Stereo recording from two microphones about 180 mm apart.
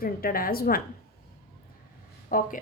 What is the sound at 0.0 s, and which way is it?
Speech, 55° left (ahead or behind).